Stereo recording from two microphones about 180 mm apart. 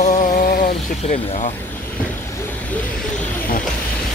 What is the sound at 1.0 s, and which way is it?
Speech, 40° left (ahead or behind).